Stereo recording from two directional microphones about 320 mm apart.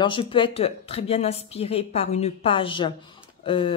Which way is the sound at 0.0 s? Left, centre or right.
Centre.